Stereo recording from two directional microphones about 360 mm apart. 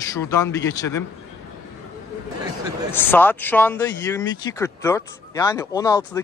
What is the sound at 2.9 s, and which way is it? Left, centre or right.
Speech, centre.